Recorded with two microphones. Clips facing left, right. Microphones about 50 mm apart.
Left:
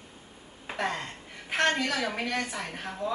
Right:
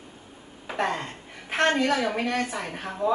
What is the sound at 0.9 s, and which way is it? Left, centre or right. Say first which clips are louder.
A woman's voice: right 3 dB; centre.